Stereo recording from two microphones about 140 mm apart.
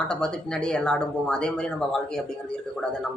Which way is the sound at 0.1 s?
5° left (ahead or behind).